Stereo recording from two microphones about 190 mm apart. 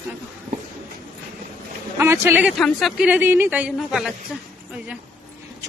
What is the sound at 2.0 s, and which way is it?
Speech, 10° right (ahead or behind).